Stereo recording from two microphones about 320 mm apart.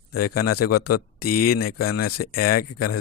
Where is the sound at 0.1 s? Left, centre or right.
Left.